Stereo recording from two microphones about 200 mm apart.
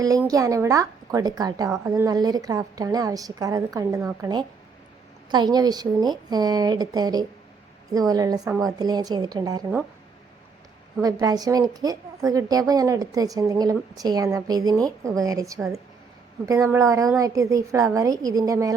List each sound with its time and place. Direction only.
0.3 s a woman's voice: 15° right (ahead or behind)
11.0 s a woman's voice: 20° right (ahead or behind)